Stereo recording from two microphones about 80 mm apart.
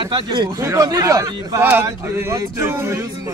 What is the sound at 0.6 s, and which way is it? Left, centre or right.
Speech, right.